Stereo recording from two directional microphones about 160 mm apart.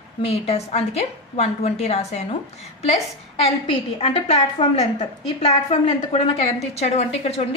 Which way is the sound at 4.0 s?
35° left (ahead or behind).